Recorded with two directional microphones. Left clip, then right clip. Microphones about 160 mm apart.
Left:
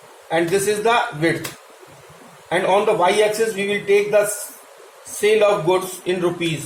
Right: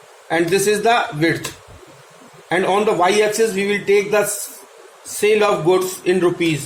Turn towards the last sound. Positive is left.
turn(degrees=-90)